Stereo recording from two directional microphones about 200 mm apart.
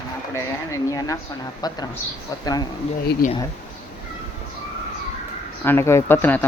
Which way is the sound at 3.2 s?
45° left (ahead or behind).